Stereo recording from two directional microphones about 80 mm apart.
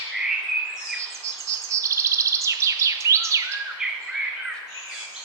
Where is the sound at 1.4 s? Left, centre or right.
Right.